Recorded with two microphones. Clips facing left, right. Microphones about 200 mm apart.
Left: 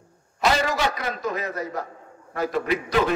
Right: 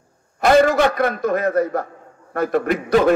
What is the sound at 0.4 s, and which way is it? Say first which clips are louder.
A man's voice: right 9 dB; 55° right (ahead or behind).